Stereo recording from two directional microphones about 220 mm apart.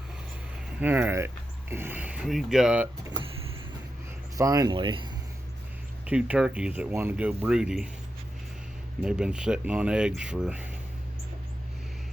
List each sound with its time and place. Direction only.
0.8 s speech: 10° right (ahead or behind)
4.4 s speech: 15° right (ahead or behind)
6.1 s speech: 5° right (ahead or behind)
9.0 s speech: 5° right (ahead or behind)